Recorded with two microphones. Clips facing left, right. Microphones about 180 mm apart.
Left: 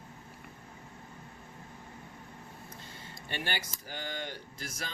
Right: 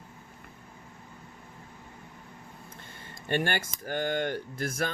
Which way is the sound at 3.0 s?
50° right (ahead or behind).